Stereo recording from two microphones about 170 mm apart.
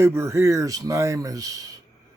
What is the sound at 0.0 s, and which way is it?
Speech, 15° right (ahead or behind).